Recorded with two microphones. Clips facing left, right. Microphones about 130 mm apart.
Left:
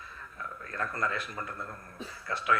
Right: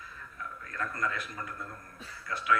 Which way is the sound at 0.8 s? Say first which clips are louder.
Left 1 dB; 30° left (ahead or behind).